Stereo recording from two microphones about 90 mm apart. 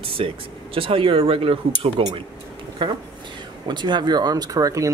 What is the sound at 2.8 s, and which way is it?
Speech, 65° right (ahead or behind).